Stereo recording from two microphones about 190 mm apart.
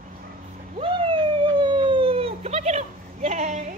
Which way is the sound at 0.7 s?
25° right (ahead or behind).